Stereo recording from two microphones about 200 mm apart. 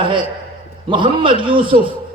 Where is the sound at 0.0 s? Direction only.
25° right (ahead or behind).